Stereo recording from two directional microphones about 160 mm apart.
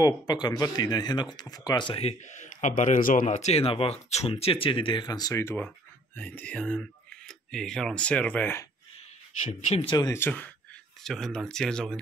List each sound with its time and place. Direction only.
0.0 s speech: 25° left (ahead or behind)
8.9 s a sound: 45° left (ahead or behind)
9.8 s speech: 25° left (ahead or behind)
10.1 s speech: 10° left (ahead or behind)